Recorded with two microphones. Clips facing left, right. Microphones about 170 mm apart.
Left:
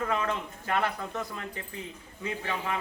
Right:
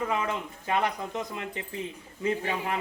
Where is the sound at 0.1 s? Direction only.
15° right (ahead or behind).